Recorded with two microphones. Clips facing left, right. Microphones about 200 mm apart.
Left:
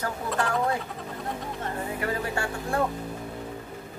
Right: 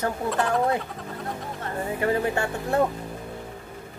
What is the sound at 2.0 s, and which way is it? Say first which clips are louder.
Speech: right 7 dB; 20° right (ahead or behind).